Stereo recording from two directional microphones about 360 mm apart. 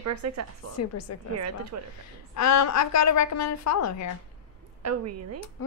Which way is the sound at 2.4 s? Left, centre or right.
Left.